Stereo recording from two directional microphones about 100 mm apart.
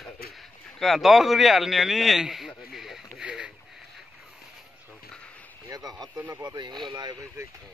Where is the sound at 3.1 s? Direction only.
10° right (ahead or behind).